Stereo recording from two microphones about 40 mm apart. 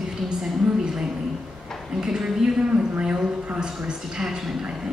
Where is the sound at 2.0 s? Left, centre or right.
Centre.